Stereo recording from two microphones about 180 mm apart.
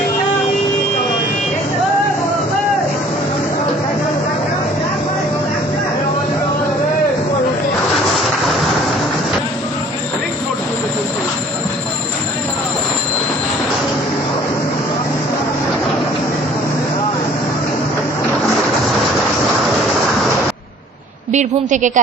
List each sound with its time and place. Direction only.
21.3 s a woman's voice: 45° right (ahead or behind)